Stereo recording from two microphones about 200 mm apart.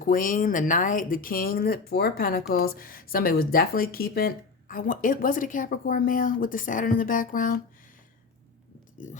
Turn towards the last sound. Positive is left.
turn(degrees=45)  # may be behind; listen again after turning